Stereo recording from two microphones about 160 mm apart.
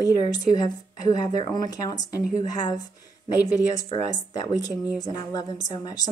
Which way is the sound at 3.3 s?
20° left (ahead or behind).